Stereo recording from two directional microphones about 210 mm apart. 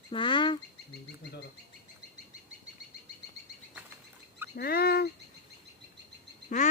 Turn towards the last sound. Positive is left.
turn(degrees=35)  # may be behind; listen again after turning